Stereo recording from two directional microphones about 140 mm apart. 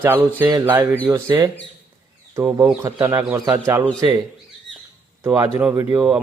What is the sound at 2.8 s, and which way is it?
Speech, 20° right (ahead or behind).